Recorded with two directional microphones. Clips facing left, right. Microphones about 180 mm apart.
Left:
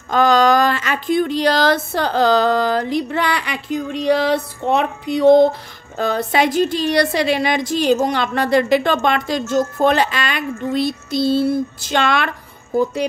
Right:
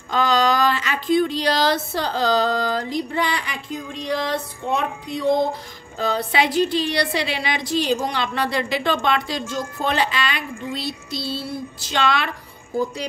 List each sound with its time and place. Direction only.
0.1 s speech: 50° left (ahead or behind); by 5.5 s 75° left (ahead or behind)
5.9 s a woman's voice: 50° left (ahead or behind)